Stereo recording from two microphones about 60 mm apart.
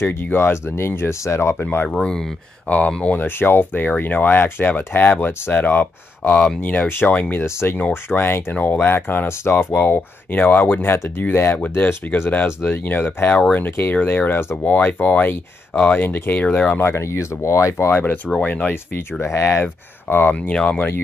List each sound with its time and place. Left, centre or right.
0.0 s speech: left
1.6 s speech: left
2.0 s speech: centre
2.9 s speech: left
3.2 s speech: left
6.3 s speech: centre
6.6 s speech: left
16.8 s speech: left
17.8 s speech: left
19.2 s speech: left
19.6 s speech: left
20.4 s speech: left